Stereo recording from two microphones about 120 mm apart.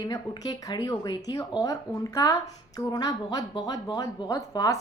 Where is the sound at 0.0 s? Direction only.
30° left (ahead or behind).